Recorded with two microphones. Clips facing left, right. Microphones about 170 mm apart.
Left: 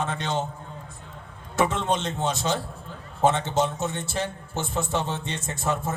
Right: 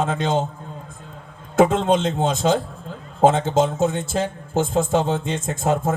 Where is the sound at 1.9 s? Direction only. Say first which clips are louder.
Right 7 dB; 90° right.